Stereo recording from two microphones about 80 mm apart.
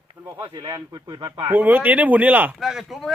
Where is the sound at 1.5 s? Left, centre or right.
Right.